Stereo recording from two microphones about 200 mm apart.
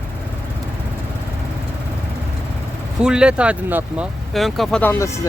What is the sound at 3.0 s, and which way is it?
Speech, 5° right (ahead or behind).